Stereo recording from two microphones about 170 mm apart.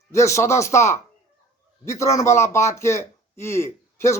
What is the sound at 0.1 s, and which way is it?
Speech, 15° left (ahead or behind).